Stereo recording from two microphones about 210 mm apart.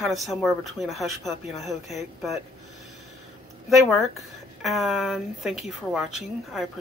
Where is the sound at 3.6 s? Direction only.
Centre (ahead or behind).